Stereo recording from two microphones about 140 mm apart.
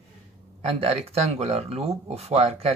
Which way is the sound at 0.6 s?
45° right (ahead or behind).